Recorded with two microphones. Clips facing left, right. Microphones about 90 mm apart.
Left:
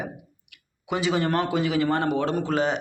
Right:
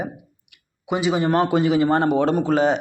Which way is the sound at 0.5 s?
15° right (ahead or behind).